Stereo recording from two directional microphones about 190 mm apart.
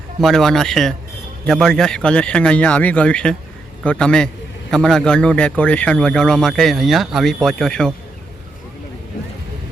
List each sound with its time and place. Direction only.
0.2 s speech: centre (ahead or behind)